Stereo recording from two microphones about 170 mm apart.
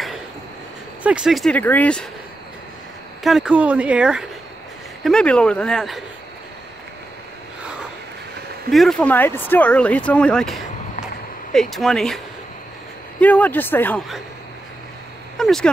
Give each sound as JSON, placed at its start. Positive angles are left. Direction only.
{"t": 1.0, "sound": "speech", "side_deg": -5}
{"t": 3.3, "sound": "speech", "side_deg": -5}
{"t": 5.0, "sound": "speech", "side_deg": 5}
{"t": 8.7, "sound": "speech", "side_deg": 5}
{"t": 11.7, "sound": "speech", "side_deg": 0}
{"t": 13.2, "sound": "speech", "side_deg": 10}
{"t": 15.3, "sound": "speech", "side_deg": 5}